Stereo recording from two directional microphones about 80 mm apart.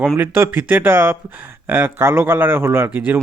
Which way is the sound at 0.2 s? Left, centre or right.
Right.